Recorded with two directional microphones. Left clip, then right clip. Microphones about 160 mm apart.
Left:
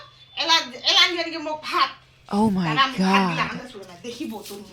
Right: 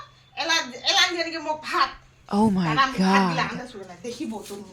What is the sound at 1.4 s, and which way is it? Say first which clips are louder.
Speech: even; 15° right (ahead or behind).